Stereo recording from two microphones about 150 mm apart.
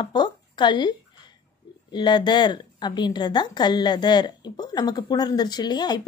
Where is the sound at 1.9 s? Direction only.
30° left (ahead or behind).